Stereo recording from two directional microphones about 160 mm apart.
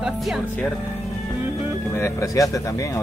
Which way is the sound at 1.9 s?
20° left (ahead or behind).